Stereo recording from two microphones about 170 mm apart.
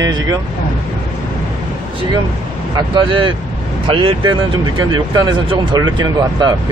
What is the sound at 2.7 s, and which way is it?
Speech, 30° right (ahead or behind).